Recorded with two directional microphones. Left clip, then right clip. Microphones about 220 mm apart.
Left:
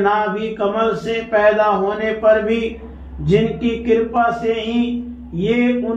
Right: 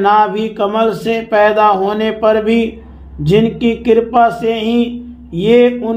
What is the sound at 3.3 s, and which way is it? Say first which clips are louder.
Speech: right 4 dB; 50° right (ahead or behind).